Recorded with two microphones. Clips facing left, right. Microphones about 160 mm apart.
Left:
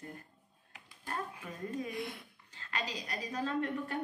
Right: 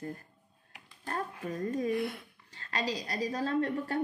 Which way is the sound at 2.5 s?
35° right (ahead or behind).